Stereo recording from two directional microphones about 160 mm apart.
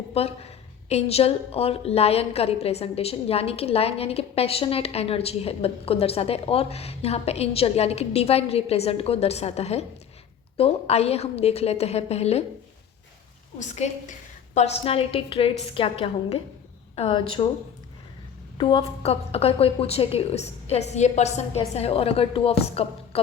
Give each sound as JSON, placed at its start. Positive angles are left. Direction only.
{"t": 0.1, "sound": "a woman's voice", "side_deg": 40}
{"t": 13.6, "sound": "a woman's voice", "side_deg": 45}
{"t": 18.5, "sound": "a woman's voice", "side_deg": 30}